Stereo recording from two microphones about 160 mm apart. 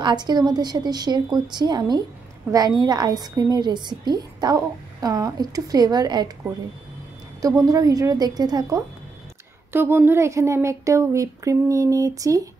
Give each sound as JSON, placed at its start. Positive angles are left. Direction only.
{"t": 0.0, "sound": "a woman's voice", "side_deg": -25}
{"t": 7.4, "sound": "a woman's voice", "side_deg": -20}
{"t": 9.7, "sound": "speech", "side_deg": -15}